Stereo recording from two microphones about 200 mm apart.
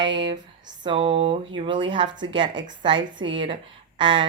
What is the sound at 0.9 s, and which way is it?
A woman's voice, 25° right (ahead or behind).